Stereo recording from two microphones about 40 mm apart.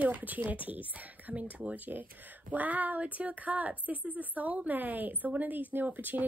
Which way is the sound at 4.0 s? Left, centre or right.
Left.